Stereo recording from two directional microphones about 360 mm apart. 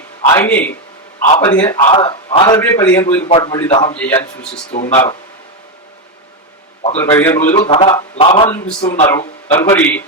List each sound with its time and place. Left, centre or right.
0.3 s a man's voice: centre
4.7 s speech: centre
6.8 s a man's voice: centre